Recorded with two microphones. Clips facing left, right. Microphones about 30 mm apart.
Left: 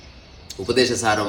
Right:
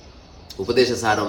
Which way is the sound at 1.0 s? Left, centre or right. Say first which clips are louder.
Even; left.